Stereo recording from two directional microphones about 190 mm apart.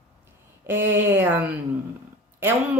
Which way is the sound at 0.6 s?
10° right (ahead or behind).